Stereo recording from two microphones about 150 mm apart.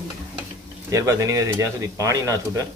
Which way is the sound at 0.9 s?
20° right (ahead or behind).